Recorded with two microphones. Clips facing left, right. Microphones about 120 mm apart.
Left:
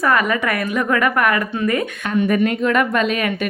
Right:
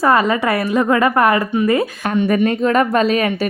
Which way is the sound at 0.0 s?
30° right (ahead or behind).